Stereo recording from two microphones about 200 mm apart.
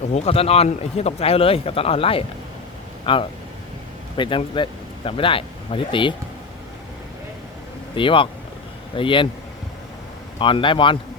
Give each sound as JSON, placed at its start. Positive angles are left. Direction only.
{"t": 0.1, "sound": "a man's voice", "side_deg": 30}
{"t": 7.9, "sound": "a man's voice", "side_deg": 25}
{"t": 10.3, "sound": "a man's voice", "side_deg": 25}